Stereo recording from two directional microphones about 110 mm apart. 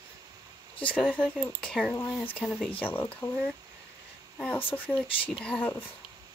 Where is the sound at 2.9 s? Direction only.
20° left (ahead or behind).